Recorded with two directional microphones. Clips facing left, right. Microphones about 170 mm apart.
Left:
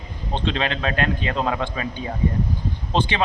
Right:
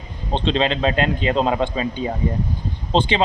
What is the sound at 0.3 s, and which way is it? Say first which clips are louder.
A man's voice: right 5 dB; 20° right (ahead or behind).